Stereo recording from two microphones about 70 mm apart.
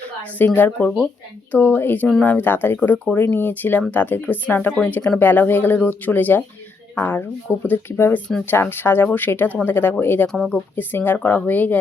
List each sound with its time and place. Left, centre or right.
0.3 s speech: left
10.2 s speech: centre
10.8 s speech: left